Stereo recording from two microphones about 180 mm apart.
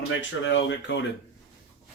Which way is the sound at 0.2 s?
90° left.